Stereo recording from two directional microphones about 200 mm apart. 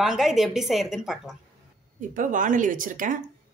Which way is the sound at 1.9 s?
40° right (ahead or behind).